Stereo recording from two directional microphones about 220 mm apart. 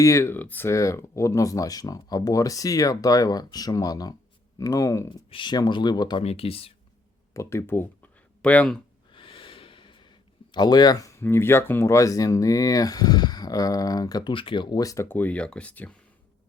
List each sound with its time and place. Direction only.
0.0 s speech: 15° left (ahead or behind)
7.3 s speech: 10° left (ahead or behind)
9.1 s speech: 25° left (ahead or behind); by 16.0 s 5° left (ahead or behind)